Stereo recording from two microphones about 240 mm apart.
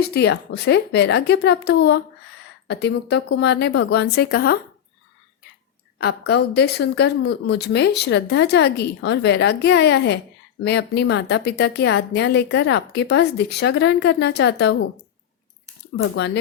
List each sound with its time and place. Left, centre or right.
0.1 s speech: left
6.0 s speech: left
16.1 s speech: left